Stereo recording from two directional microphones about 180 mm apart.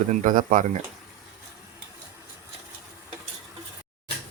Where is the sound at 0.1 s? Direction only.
45° right (ahead or behind).